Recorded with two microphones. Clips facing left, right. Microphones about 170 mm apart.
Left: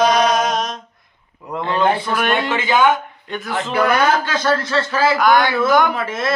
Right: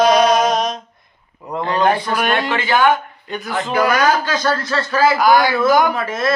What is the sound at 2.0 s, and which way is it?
Chant, centre (ahead or behind).